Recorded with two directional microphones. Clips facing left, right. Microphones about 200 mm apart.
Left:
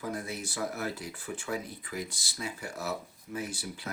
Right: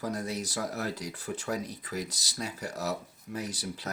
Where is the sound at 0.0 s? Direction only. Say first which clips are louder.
Right 3 dB; 40° right (ahead or behind).